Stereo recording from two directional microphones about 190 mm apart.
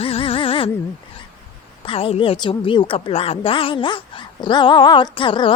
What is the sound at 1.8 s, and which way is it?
Speech, 30° left (ahead or behind).